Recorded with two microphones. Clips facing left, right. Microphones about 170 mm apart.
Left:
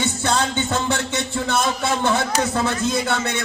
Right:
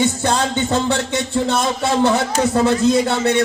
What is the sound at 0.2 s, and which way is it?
Speech, 35° right (ahead or behind).